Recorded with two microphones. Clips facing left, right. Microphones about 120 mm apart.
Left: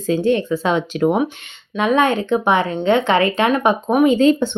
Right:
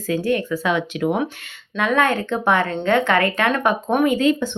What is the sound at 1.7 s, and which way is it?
Speech, 20° left (ahead or behind).